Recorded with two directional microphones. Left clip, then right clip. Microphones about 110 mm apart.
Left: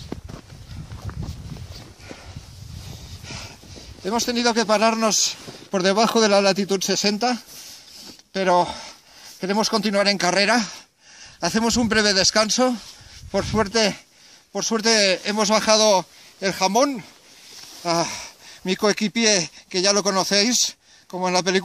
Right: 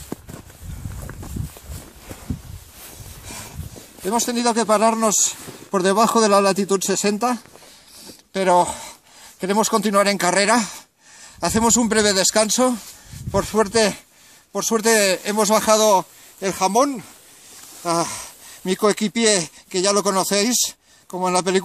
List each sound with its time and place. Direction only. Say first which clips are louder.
3.3 s snort: even; 5° left (ahead or behind)
4.0 s speech: right 1 dB; 5° left (ahead or behind)
4.6 s speech: right 4 dB; 15° left (ahead or behind)
8.0 s a sound: right 2 dB; 10° left (ahead or behind)
9.4 s speech: right 3 dB; 10° left (ahead or behind); by 17.0 s 35° left (ahead or behind)
17.8 s a sound: right 1 dB; 30° left (ahead or behind)
18.7 s speech: right 2 dB; 10° left (ahead or behind)